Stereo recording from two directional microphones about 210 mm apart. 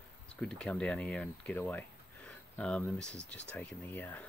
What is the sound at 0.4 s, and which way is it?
Speech, 5° left (ahead or behind).